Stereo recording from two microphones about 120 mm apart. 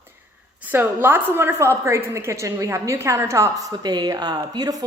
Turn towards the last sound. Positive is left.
turn(degrees=-30)  # may be behind; listen again after turning